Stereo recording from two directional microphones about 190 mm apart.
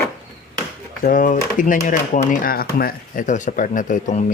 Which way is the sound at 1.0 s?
50° left (ahead or behind).